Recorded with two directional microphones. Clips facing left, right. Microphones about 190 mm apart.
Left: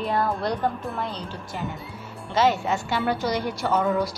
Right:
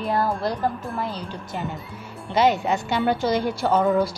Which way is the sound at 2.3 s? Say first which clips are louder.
Right 2 dB; 15° right (ahead or behind).